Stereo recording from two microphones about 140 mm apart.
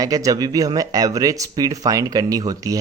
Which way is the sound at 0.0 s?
25° right (ahead or behind).